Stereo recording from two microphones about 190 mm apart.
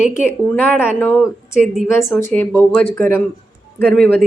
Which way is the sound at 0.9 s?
10° left (ahead or behind).